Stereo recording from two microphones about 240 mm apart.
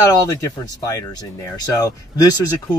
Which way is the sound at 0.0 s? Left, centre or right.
Centre.